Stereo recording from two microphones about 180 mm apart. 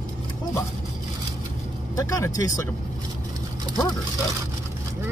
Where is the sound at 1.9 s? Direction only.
20° left (ahead or behind).